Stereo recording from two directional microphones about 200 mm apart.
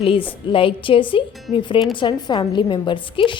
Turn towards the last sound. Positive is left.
turn(degrees=25)  # may be behind; listen again after turning